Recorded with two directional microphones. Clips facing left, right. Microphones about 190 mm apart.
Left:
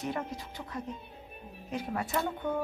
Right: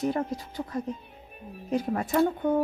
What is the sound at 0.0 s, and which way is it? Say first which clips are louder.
Speech: right 7 dB; 35° right (ahead or behind).